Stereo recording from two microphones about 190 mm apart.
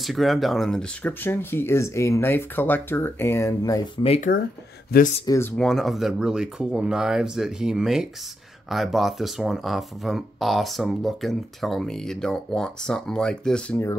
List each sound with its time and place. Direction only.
0.0 s speech: centre (ahead or behind); by 4.0 s 15° left (ahead or behind)
4.0 s speech: 30° left (ahead or behind)
5.2 s speech: 15° left (ahead or behind)
5.6 s speech: centre (ahead or behind)